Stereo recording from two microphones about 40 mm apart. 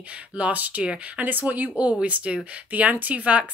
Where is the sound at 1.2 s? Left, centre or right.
Right.